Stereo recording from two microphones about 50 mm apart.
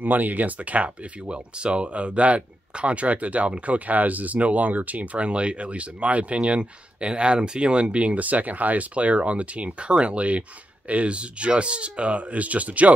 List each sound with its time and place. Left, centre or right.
0.0 s speech: right